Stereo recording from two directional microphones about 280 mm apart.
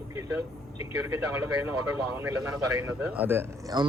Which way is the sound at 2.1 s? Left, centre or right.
Centre.